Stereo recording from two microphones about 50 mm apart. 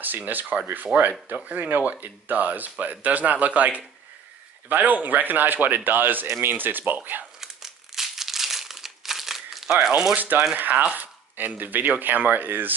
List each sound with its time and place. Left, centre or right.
0.0 s speech: right
7.3 s crumpling: centre
9.8 s speech: centre
10.1 s speech: right